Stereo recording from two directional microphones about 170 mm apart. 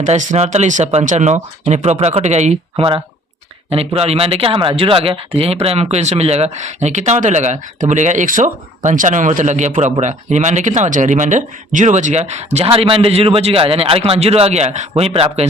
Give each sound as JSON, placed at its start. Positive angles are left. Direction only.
{"t": 0.0, "sound": "speech", "side_deg": -45}